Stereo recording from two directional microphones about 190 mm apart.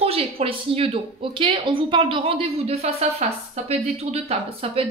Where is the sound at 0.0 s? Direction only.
30° right (ahead or behind).